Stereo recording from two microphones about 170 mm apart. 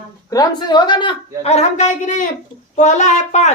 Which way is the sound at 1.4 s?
40° left (ahead or behind).